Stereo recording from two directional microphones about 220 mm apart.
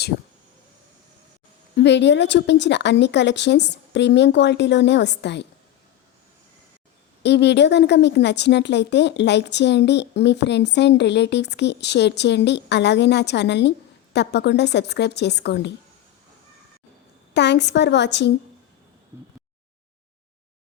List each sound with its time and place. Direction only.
1.7 s a woman's voice: 50° left (ahead or behind)
7.2 s a woman's voice: 50° left (ahead or behind)
17.3 s a woman's voice: 50° left (ahead or behind)